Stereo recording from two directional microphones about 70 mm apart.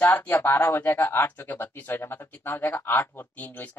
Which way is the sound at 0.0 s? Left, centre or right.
Left.